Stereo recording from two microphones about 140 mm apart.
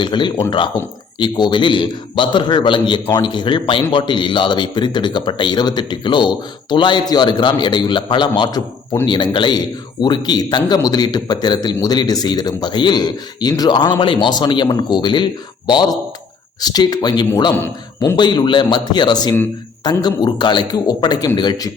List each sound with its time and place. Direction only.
0.0 s a man's voice: 35° left (ahead or behind)
17.6 s speech: 15° left (ahead or behind)
18.2 s a man's voice: 30° left (ahead or behind)